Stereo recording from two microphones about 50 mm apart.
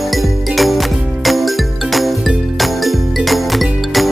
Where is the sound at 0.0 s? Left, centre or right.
Centre.